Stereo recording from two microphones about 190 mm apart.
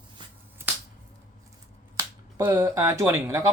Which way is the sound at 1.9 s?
15° right (ahead or behind).